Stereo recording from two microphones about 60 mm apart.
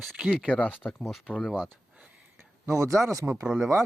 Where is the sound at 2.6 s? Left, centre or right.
Right.